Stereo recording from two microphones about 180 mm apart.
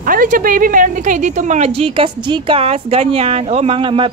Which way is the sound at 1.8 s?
30° right (ahead or behind).